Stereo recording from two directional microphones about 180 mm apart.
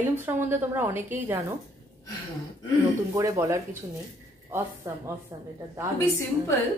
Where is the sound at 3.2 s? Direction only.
15° right (ahead or behind).